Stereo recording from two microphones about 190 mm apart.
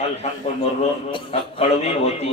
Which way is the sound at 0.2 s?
35° left (ahead or behind).